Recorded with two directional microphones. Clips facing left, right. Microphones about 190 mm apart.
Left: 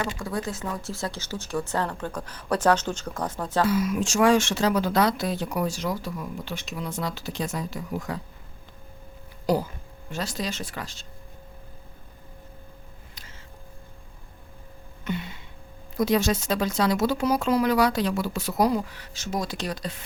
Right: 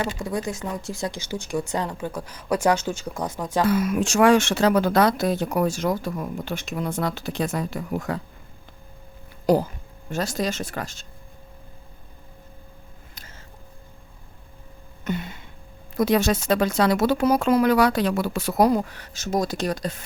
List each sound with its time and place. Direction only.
0.0 s speech: 20° right (ahead or behind)
3.7 s speech: 55° right (ahead or behind)
9.5 s speech: 45° right (ahead or behind)
15.0 s a sound: 45° right (ahead or behind)
16.0 s speech: 60° right (ahead or behind); by 20.0 s 45° right (ahead or behind)